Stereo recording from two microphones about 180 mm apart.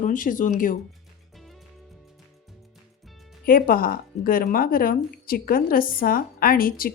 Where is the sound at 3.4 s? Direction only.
50° left (ahead or behind).